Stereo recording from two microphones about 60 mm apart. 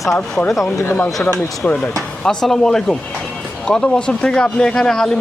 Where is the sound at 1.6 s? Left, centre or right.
Left.